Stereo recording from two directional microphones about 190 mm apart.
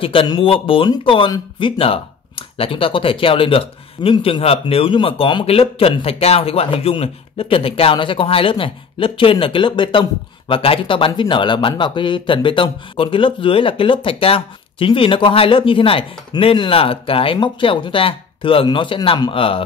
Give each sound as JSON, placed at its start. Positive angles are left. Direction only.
{"t": 0.0, "sound": "speech", "side_deg": 30}